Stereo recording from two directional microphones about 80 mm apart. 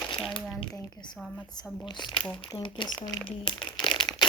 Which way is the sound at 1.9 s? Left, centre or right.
Left.